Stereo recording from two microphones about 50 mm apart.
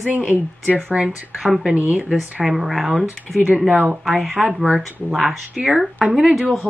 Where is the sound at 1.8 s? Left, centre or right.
Right.